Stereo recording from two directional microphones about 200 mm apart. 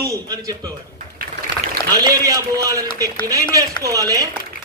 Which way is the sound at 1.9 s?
20° right (ahead or behind).